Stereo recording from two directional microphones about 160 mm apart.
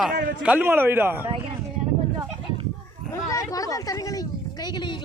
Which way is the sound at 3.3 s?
20° left (ahead or behind).